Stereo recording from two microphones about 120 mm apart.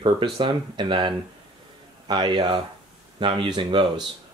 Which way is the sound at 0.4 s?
40° right (ahead or behind).